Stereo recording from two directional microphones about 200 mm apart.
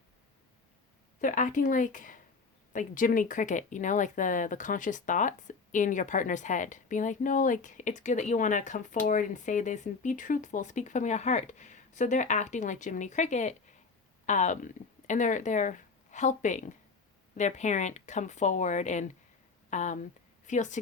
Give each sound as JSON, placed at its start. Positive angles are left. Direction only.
{"t": 1.2, "sound": "speech", "side_deg": 40}